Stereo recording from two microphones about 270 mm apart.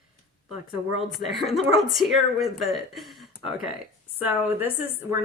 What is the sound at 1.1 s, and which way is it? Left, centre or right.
A woman's voice, centre.